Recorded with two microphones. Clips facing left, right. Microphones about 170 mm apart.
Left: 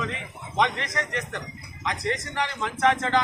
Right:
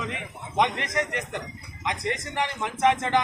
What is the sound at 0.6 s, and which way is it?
A man's voice, 15° right (ahead or behind).